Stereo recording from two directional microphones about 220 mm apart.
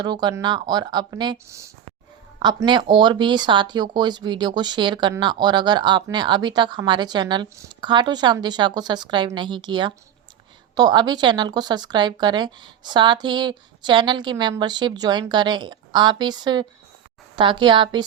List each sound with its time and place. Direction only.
0.0 s speech: 20° right (ahead or behind)